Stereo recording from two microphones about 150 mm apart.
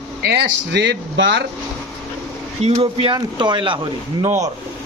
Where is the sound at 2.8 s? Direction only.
35° right (ahead or behind).